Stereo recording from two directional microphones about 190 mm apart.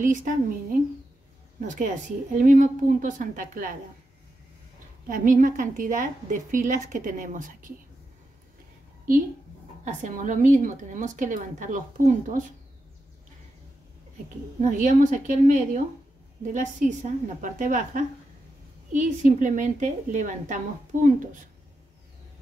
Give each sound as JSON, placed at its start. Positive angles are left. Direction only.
{"t": 0.0, "sound": "a woman's voice", "side_deg": -45}
{"t": 5.0, "sound": "a woman's voice", "side_deg": -45}
{"t": 9.8, "sound": "a woman's voice", "side_deg": -40}
{"t": 14.6, "sound": "a woman's voice", "side_deg": -40}